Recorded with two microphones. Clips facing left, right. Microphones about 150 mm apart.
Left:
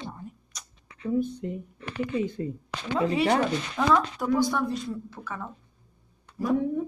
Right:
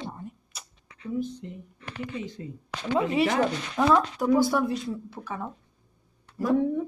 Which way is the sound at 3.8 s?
10° right (ahead or behind).